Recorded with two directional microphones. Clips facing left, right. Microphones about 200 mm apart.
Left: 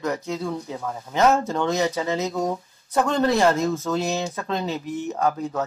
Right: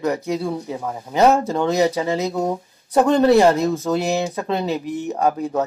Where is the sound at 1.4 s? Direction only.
35° right (ahead or behind).